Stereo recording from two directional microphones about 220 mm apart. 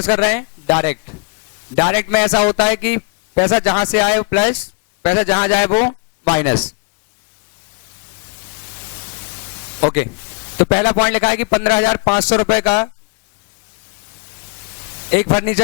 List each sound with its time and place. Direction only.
0.0 s a man's voice: 15° left (ahead or behind)
10.6 s a man's voice: 20° left (ahead or behind)
15.1 s a man's voice: 20° left (ahead or behind)